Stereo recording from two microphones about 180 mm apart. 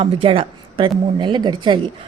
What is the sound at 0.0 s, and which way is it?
Speech, 30° right (ahead or behind).